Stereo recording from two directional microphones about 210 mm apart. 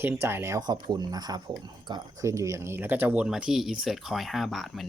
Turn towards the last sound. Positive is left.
turn(degrees=0)  # may be behind; listen again after turning